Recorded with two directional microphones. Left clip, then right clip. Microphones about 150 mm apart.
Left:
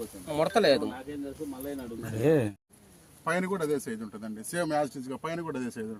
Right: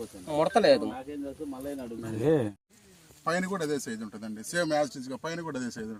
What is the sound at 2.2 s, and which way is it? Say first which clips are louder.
Speech: left 1 dB; 75° left (ahead or behind).